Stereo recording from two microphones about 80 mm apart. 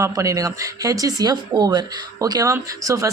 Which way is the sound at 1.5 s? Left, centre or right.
Right.